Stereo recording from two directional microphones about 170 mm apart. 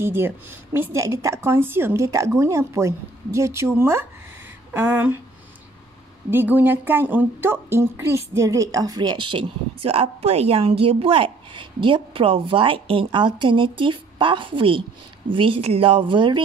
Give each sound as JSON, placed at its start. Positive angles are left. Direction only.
{"t": 0.0, "sound": "a woman's voice", "side_deg": -15}
{"t": 6.3, "sound": "a woman's voice", "side_deg": -10}